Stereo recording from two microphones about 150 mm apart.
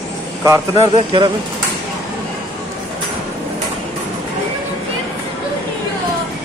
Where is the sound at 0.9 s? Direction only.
35° right (ahead or behind).